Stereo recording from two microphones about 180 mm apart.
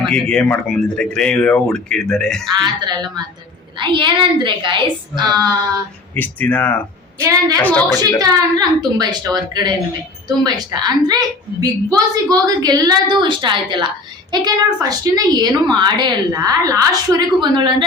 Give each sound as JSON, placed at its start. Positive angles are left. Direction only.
{"t": 0.0, "sound": "speech", "side_deg": 5}
{"t": 2.6, "sound": "a woman's voice", "side_deg": -25}
{"t": 6.1, "sound": "speech", "side_deg": 10}
{"t": 7.2, "sound": "a woman's voice", "side_deg": -20}
{"t": 7.6, "sound": "speech", "side_deg": 10}
{"t": 8.2, "sound": "a woman's voice", "side_deg": -20}